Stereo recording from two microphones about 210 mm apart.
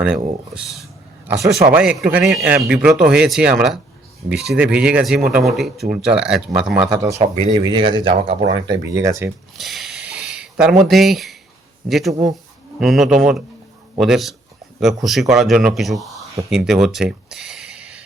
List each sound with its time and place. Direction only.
0.0 s speech: 5° right (ahead or behind)
7.2 s speech: 25° right (ahead or behind)
9.6 s a sound: centre (ahead or behind)
10.8 s speech: centre (ahead or behind)
12.1 s speech: 15° right (ahead or behind)
12.8 s speech: centre (ahead or behind)